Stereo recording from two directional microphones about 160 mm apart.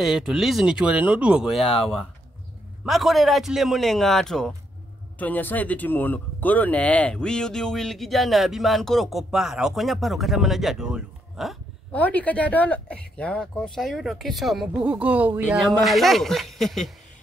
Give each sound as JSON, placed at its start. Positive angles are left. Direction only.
{"t": 0.0, "sound": "speech", "side_deg": -5}
{"t": 11.9, "sound": "speech", "side_deg": 10}